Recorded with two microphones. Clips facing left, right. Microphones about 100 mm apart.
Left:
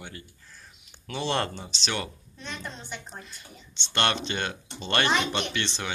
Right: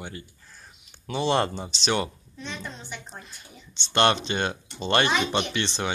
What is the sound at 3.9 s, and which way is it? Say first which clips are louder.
A child's voice: right 5 dB; 20° right (ahead or behind).